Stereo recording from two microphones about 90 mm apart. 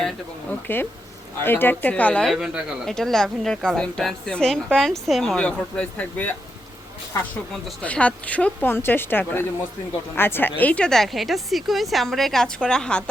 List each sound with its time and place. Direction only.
0.7 s speech: 25° left (ahead or behind)
2.2 s speech: 5° right (ahead or behind)
2.8 s a woman's voice: 5° left (ahead or behind)
7.8 s a woman's voice: 15° left (ahead or behind)
8.7 s a woman's voice: 25° left (ahead or behind); by 13.1 s 10° left (ahead or behind)